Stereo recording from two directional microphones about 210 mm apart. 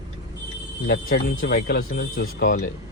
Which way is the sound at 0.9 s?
45° left (ahead or behind).